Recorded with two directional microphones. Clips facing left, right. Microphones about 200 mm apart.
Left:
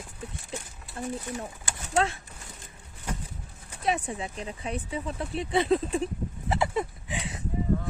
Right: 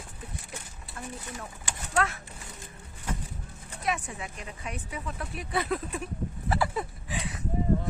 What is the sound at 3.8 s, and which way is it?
A woman's voice, 30° left (ahead or behind).